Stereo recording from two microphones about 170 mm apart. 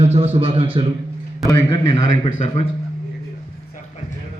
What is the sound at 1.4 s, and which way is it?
Speech, 20° left (ahead or behind).